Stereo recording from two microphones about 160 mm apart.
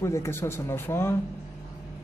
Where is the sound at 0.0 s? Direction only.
15° left (ahead or behind).